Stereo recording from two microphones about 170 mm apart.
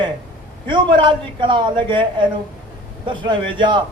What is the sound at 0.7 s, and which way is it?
A man's voice, 30° right (ahead or behind).